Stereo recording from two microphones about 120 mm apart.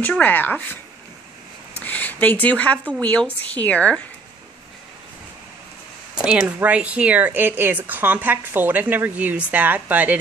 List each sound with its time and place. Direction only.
0.0 s a woman's voice: 15° left (ahead or behind)
1.8 s a woman's voice: 15° left (ahead or behind)
6.1 s speech: 10° right (ahead or behind)